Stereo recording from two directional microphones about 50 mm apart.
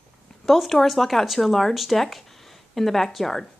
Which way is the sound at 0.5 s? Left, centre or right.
Centre.